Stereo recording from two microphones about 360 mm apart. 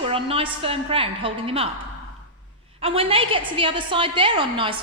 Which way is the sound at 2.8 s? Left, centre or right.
Centre.